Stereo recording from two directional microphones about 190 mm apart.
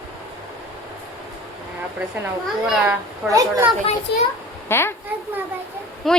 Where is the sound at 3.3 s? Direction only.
15° right (ahead or behind).